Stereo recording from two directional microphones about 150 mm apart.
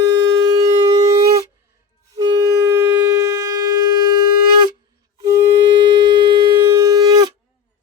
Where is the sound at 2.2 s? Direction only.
25° right (ahead or behind).